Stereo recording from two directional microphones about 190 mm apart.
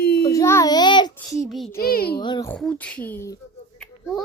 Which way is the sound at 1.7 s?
50° left (ahead or behind).